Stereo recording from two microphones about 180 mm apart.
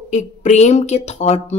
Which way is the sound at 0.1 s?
40° left (ahead or behind).